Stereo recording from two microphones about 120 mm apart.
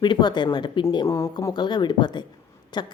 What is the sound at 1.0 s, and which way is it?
A woman's voice, 25° left (ahead or behind).